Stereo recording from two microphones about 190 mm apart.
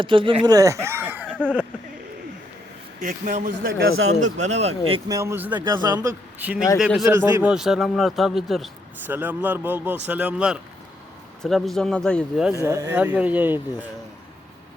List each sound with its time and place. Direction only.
0.0 s speech: 25° right (ahead or behind); by 1.3 s 10° right (ahead or behind)
3.0 s a man's voice: 45° right (ahead or behind)
5.0 s speech: 15° right (ahead or behind)
5.6 s a man's voice: 20° right (ahead or behind); by 7.1 s 5° right (ahead or behind)
7.3 s speech: 15° right (ahead or behind)
7.5 s a man's voice: centre (ahead or behind)
12.5 s speech: 15° right (ahead or behind)